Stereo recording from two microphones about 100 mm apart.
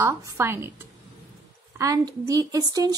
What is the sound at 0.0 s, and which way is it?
Speech, 30° right (ahead or behind).